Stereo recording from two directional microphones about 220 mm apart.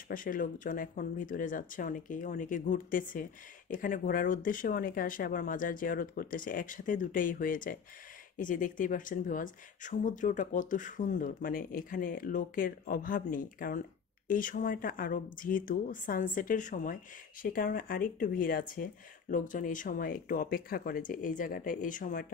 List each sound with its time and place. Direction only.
0.1 s speech: 40° left (ahead or behind)